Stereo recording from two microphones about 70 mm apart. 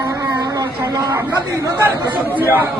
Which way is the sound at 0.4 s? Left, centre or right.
Right.